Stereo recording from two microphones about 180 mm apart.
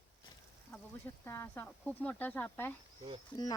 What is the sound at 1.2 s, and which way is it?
Speech, 15° left (ahead or behind).